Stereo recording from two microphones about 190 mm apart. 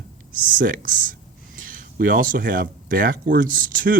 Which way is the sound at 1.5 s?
45° right (ahead or behind).